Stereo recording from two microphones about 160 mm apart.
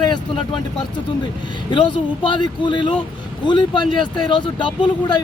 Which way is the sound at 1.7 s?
30° left (ahead or behind).